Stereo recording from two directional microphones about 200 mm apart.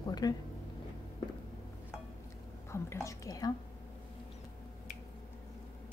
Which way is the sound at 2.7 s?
15° left (ahead or behind).